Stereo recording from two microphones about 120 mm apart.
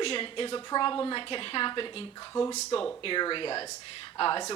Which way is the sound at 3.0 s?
40° left (ahead or behind).